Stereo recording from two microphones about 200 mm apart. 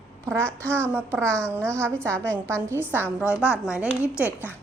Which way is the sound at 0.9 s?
10° right (ahead or behind).